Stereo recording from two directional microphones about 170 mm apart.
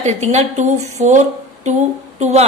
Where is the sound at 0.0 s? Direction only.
40° right (ahead or behind).